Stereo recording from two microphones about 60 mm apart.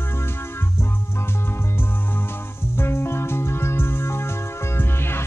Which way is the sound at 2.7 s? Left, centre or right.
Left.